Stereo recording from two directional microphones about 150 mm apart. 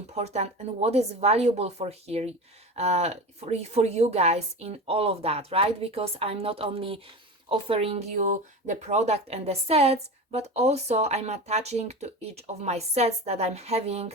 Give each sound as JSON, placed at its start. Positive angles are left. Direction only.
{"t": 0.1, "sound": "speech", "side_deg": -45}